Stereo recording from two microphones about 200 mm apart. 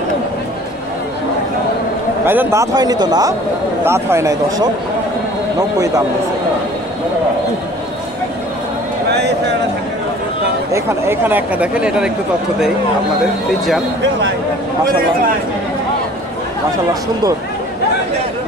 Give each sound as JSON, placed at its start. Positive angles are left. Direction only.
{"t": 2.2, "sound": "speech", "side_deg": -15}
{"t": 10.7, "sound": "speech", "side_deg": -10}